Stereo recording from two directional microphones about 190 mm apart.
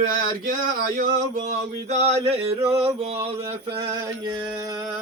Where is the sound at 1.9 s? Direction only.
35° right (ahead or behind).